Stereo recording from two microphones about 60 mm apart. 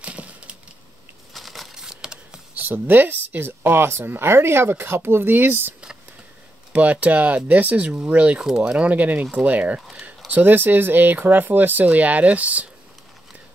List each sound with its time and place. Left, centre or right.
0.0 s splinter: right
1.3 s crumpling: centre
2.5 s speech: right
6.7 s speech: right
8.5 s speech: centre
8.8 s speech: right
9.8 s speech: centre
10.0 s speech: right